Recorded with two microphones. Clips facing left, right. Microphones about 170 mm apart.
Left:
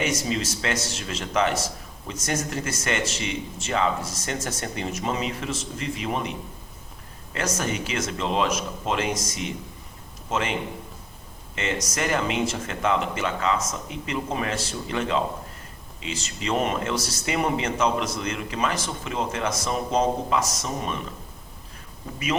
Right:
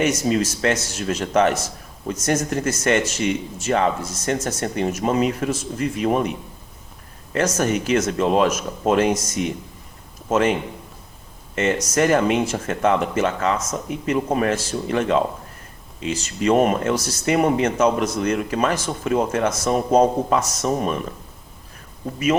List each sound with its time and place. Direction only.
0.0 s speech: 45° right (ahead or behind)
7.3 s a man's voice: 45° right (ahead or behind)
11.5 s speech: 40° right (ahead or behind)